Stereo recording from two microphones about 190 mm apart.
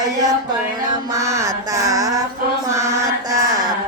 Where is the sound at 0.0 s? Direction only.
15° right (ahead or behind).